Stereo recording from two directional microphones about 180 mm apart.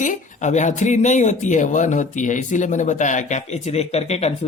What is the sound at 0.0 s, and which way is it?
Speech, 45° left (ahead or behind).